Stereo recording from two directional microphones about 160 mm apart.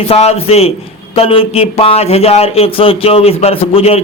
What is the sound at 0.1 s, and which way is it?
Speech, 40° left (ahead or behind).